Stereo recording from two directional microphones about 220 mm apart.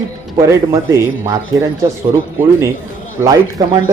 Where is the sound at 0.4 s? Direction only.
15° right (ahead or behind).